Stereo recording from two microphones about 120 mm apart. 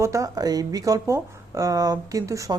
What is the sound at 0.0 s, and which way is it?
Speech, 25° right (ahead or behind).